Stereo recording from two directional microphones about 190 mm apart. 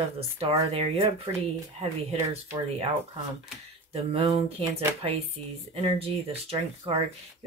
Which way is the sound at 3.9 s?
30° right (ahead or behind).